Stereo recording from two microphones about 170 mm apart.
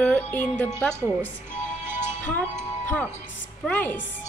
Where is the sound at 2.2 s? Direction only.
10° left (ahead or behind).